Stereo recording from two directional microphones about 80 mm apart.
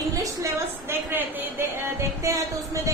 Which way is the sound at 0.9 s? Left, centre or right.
Right.